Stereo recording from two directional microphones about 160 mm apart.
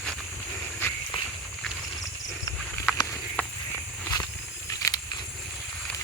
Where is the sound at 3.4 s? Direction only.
10° left (ahead or behind).